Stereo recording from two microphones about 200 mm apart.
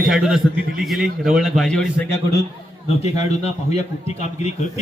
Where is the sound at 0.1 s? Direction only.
Centre (ahead or behind).